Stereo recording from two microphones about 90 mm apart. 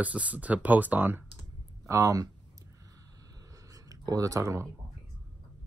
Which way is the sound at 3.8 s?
40° right (ahead or behind).